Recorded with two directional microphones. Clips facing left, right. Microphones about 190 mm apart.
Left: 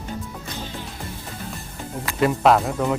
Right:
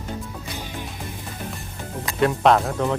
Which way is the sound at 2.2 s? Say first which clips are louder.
Even; centre (ahead or behind).